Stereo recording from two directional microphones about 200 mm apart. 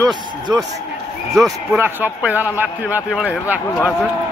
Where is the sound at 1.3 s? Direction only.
Centre (ahead or behind).